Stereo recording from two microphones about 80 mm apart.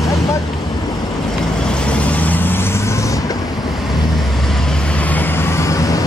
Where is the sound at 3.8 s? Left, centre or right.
Centre; by 6.0 s left.